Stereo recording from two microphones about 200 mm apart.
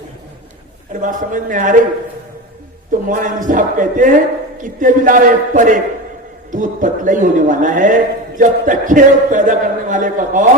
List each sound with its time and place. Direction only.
1.0 s a man's voice: 40° right (ahead or behind)
2.9 s a man's voice: 40° right (ahead or behind)